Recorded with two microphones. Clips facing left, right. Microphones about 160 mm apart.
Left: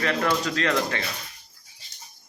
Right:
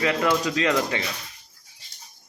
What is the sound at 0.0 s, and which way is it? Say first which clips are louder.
Speech: right 2 dB; 15° right (ahead or behind).